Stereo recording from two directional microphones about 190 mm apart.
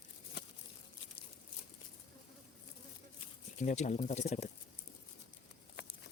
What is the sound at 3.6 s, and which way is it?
Speech, 35° left (ahead or behind).